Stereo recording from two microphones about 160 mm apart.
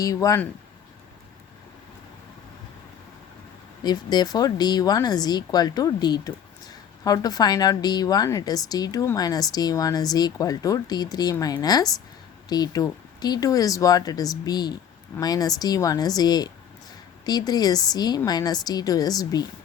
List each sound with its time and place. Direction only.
0.0 s speech: 20° left (ahead or behind)
3.8 s speech: 25° left (ahead or behind)